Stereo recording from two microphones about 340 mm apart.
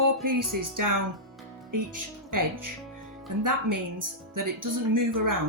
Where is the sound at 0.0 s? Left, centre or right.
Right.